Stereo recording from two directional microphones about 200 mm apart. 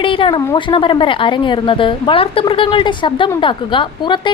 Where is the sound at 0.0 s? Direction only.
25° left (ahead or behind).